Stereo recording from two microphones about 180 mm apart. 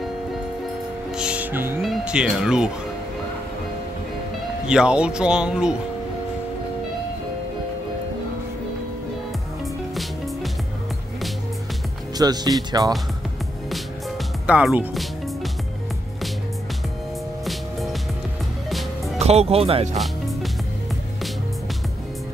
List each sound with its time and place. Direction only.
1.1 s music: 5° right (ahead or behind)
4.6 s speech: 5° right (ahead or behind)
9.9 s music: centre (ahead or behind)
12.2 s speech: 20° right (ahead or behind)
14.4 s speech: 5° right (ahead or behind)
17.5 s music: centre (ahead or behind)
19.1 s speech: 35° right (ahead or behind)